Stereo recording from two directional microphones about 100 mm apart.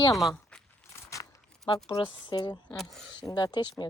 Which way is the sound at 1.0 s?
30° left (ahead or behind).